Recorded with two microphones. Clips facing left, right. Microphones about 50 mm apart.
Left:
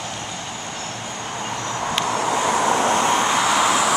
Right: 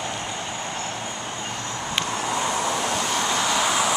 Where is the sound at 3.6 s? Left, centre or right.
Centre.